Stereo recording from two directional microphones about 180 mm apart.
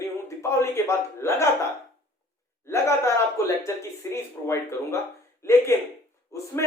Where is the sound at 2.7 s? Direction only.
15° left (ahead or behind).